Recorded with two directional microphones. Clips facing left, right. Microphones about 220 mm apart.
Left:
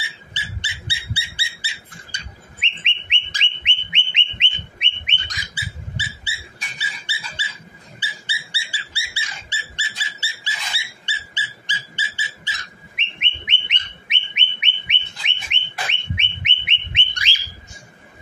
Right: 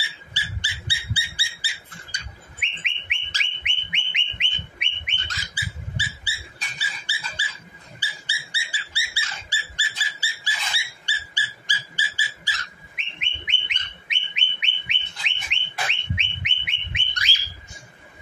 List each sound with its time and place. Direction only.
0.3 s bird: 20° left (ahead or behind)
8.0 s dog: 25° left (ahead or behind)
15.5 s bird: 20° left (ahead or behind)